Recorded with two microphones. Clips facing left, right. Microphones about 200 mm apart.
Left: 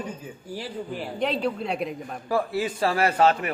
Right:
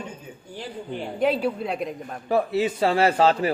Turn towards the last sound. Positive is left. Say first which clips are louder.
# right 2 dB
turn(degrees=-30)  # may be behind; listen again after turning